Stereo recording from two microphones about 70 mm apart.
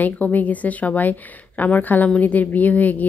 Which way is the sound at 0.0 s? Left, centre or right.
Left.